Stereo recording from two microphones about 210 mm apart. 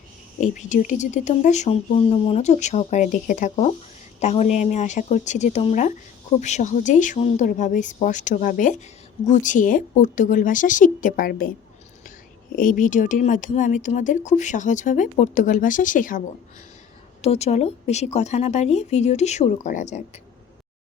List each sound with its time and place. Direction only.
0.3 s speech: 35° left (ahead or behind)
12.5 s speech: 40° left (ahead or behind)